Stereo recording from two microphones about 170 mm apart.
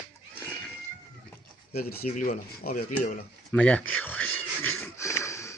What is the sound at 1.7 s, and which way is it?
Speech, 65° left (ahead or behind).